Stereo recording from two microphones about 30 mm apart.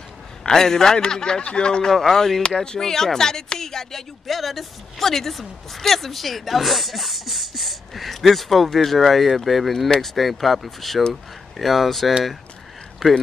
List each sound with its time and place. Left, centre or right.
0.4 s a man's voice: centre
0.9 s speech: left
1.9 s speech: centre
4.3 s speech: centre